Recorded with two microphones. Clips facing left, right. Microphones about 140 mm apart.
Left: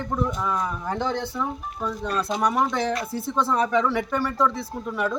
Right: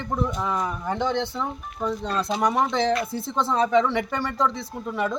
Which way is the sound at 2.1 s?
10° left (ahead or behind).